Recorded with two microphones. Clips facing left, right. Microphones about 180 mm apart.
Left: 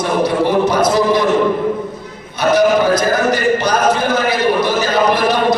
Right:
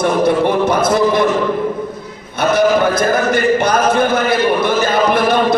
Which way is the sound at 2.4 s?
55° right (ahead or behind).